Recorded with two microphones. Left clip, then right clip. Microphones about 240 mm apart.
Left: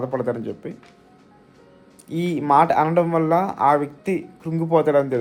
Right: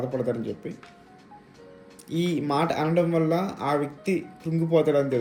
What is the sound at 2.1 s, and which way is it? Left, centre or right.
Speech, centre.